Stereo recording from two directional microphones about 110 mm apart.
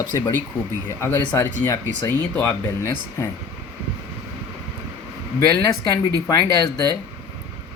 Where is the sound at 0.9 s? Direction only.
20° left (ahead or behind).